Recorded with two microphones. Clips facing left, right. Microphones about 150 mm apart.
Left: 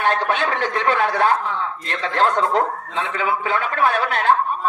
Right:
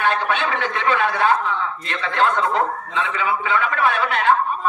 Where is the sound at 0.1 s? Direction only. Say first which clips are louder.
Left 1 dB; 40° left (ahead or behind).